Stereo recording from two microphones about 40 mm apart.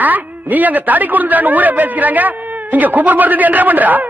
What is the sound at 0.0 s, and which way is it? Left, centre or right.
A man's voice, right.